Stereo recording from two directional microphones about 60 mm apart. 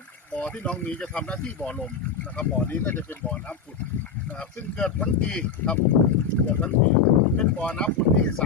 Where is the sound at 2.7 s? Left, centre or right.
Left.